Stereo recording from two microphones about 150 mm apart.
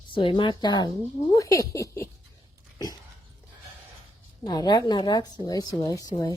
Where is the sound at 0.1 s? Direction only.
35° left (ahead or behind).